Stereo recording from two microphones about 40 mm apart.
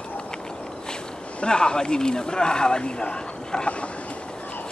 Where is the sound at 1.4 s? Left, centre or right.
Left.